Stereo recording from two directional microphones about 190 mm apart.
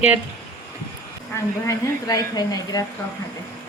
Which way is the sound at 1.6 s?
20° left (ahead or behind).